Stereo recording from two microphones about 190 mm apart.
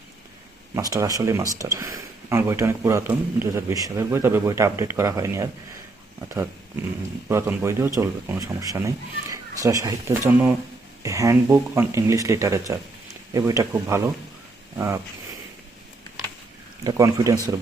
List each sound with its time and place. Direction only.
0.8 s speech: 20° right (ahead or behind)
16.8 s speech: 15° right (ahead or behind)